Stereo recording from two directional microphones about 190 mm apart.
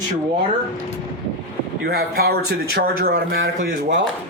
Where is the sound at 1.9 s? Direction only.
55° right (ahead or behind).